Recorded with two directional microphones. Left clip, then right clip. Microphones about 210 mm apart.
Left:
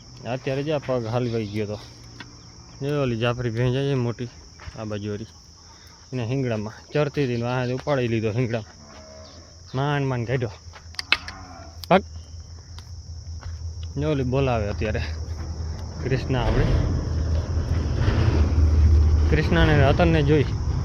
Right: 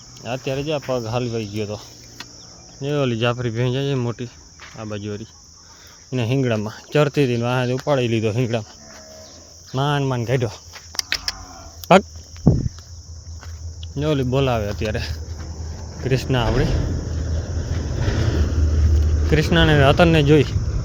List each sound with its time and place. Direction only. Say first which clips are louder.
0.2 s cricket: right 2 dB; 5° right (ahead or behind)
0.9 s speech: right 2 dB; 5° right (ahead or behind)
2.8 s cricket: right 3 dB; 10° right (ahead or behind)
4.8 s speech: right 1 dB; 5° right (ahead or behind)
6.1 s speech: right 6 dB; 30° right (ahead or behind)
9.7 s speech: right 4 dB; 20° right (ahead or behind)
11.3 s a sound: right 10 dB; 35° right (ahead or behind)
13.9 s cricket: right 4 dB; 15° right (ahead or behind)
16.0 s a sound: right 5 dB; 20° right (ahead or behind)
19.3 s speech: right 4 dB; 20° right (ahead or behind)